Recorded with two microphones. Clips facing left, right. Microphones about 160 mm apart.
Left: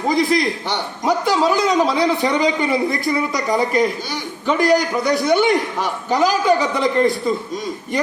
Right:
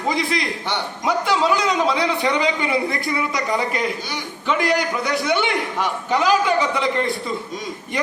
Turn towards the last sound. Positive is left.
turn(degrees=40)  # may be behind; listen again after turning